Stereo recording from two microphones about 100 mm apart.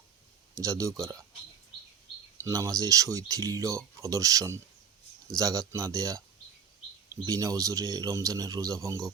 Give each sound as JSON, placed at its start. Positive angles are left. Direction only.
{"t": 0.5, "sound": "speech", "side_deg": -35}
{"t": 2.4, "sound": "speech", "side_deg": -35}
{"t": 7.3, "sound": "speech", "side_deg": -35}